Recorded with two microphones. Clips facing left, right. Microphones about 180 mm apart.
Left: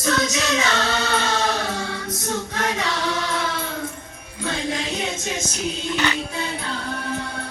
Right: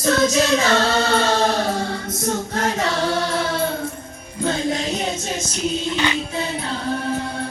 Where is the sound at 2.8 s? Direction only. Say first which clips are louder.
Right 4 dB; 30° right (ahead or behind).